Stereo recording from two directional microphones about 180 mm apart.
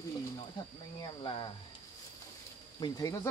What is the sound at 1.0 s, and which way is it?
Speech, 25° left (ahead or behind).